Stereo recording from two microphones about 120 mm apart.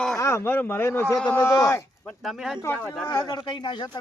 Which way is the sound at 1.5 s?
25° left (ahead or behind).